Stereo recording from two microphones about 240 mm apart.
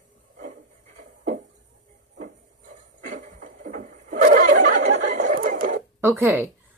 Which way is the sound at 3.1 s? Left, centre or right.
Right.